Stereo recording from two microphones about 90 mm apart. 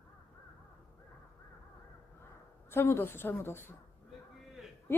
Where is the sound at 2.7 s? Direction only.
30° left (ahead or behind).